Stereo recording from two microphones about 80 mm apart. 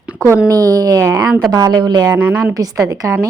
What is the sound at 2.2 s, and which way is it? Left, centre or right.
Speech, right.